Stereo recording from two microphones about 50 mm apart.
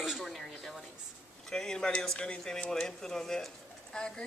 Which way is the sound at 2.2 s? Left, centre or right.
Left.